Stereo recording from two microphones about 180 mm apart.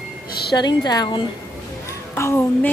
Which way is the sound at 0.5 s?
25° left (ahead or behind).